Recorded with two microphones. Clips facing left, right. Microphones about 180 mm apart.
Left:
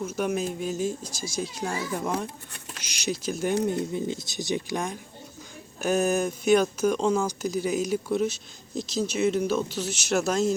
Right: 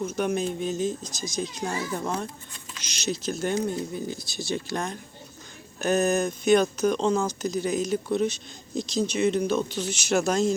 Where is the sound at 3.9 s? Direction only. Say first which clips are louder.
Left 3 dB; 20° left (ahead or behind).